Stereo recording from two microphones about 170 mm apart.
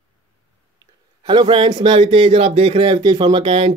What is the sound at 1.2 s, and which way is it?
Speech, 25° right (ahead or behind).